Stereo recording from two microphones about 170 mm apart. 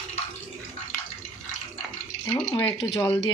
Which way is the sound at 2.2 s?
15° left (ahead or behind).